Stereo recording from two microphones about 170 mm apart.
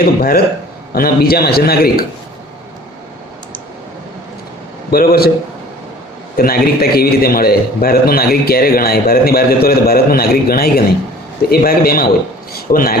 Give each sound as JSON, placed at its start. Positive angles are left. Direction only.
{"t": 0.0, "sound": "a man's voice", "side_deg": 60}
{"t": 4.9, "sound": "a man's voice", "side_deg": 65}
{"t": 6.3, "sound": "a man's voice", "side_deg": 60}